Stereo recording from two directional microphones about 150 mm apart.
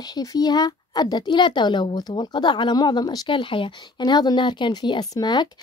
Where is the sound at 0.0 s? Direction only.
25° left (ahead or behind).